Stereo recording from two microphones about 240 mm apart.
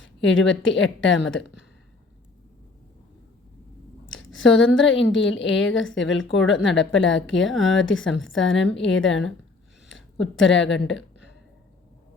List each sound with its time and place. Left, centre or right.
0.0 s a woman's voice: left
4.1 s a sound: left
4.5 s a woman's voice: left